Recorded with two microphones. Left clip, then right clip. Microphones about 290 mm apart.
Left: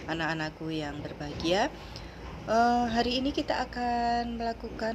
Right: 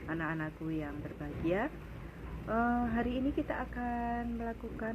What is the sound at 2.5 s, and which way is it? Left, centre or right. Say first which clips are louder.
A woman's voice: left 8 dB; left.